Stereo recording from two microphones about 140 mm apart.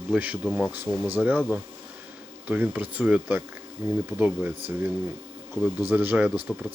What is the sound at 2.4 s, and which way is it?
Speech, 10° right (ahead or behind).